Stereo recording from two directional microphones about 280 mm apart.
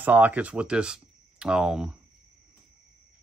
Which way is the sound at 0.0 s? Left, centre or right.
Centre.